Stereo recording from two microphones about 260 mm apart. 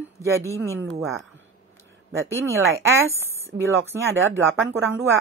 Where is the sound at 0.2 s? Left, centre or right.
Centre.